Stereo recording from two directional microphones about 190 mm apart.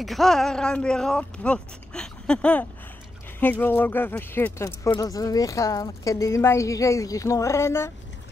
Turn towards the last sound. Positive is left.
turn(degrees=15)  # may be behind; listen again after turning